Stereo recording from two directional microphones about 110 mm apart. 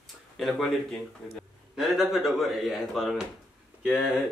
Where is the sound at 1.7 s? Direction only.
5° right (ahead or behind).